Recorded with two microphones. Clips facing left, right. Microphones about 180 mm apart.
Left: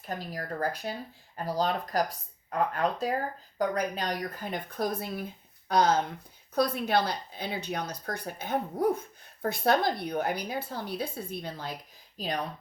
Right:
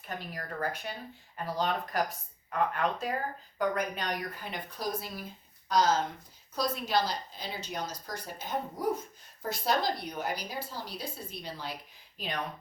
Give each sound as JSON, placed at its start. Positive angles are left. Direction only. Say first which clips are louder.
{"t": 0.2, "sound": "a woman's voice", "louder": "left 2 dB", "side_deg": 35}
{"t": 12.1, "sound": "speech", "louder": "left 5 dB", "side_deg": 40}